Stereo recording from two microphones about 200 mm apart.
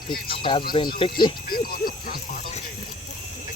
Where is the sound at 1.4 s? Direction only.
45° left (ahead or behind).